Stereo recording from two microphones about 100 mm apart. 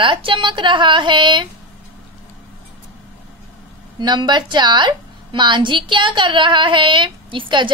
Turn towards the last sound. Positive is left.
turn(degrees=-55)  # may be behind; listen again after turning